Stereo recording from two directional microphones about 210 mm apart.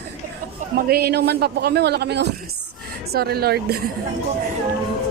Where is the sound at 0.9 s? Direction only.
45° right (ahead or behind).